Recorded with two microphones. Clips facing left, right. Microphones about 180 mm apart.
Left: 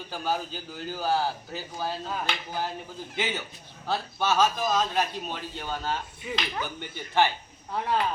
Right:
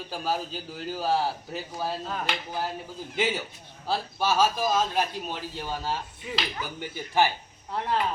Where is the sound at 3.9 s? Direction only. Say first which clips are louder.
Even; 10° right (ahead or behind).